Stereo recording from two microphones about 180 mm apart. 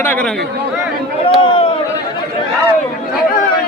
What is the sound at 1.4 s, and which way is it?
Speech, 30° left (ahead or behind).